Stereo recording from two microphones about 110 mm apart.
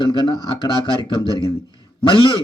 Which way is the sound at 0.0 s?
45° left (ahead or behind).